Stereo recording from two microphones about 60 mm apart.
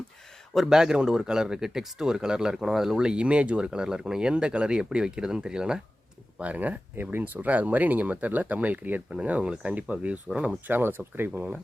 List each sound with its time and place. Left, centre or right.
0.5 s speech: centre
6.4 s speech: right
6.9 s speech: right
10.7 s speech: right